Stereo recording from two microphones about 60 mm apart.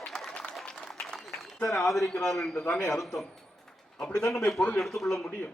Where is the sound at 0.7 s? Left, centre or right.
Centre.